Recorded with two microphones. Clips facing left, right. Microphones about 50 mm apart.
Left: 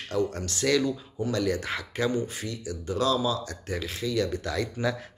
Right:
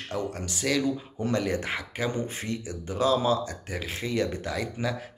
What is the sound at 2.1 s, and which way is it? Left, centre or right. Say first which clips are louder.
Speech: left 1 dB; right.